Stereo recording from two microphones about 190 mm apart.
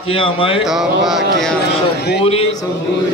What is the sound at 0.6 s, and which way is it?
Speech, centre (ahead or behind).